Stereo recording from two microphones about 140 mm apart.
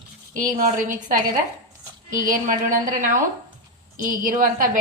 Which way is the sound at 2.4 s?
70° right (ahead or behind).